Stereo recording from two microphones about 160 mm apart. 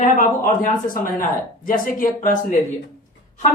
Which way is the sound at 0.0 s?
55° left (ahead or behind).